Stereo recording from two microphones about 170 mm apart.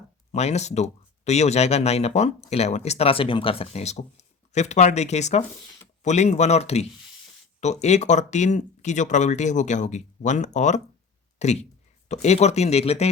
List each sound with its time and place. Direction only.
0.3 s speech: 40° left (ahead or behind)